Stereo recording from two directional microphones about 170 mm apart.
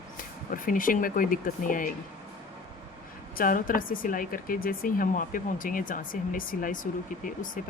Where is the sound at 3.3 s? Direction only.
55° left (ahead or behind).